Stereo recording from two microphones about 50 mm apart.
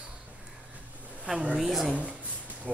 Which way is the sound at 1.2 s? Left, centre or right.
Centre.